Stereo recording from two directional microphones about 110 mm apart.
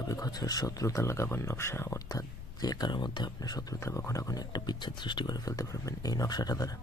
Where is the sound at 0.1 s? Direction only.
35° left (ahead or behind).